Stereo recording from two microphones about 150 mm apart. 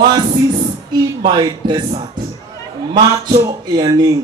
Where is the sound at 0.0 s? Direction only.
30° right (ahead or behind).